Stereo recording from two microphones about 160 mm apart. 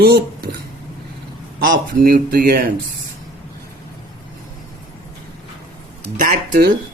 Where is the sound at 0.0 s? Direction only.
75° right (ahead or behind).